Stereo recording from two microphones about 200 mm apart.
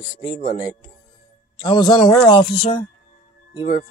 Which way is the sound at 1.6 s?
20° left (ahead or behind).